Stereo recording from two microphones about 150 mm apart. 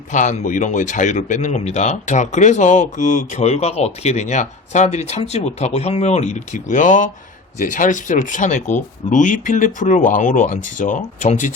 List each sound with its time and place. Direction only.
0.1 s speech: 55° left (ahead or behind)